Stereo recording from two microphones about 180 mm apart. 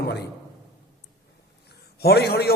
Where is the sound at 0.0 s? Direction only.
65° left (ahead or behind).